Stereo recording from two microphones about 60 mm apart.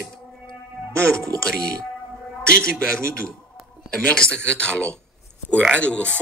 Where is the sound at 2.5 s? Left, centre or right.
Centre.